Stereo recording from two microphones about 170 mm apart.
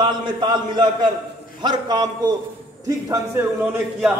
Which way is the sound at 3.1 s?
15° right (ahead or behind).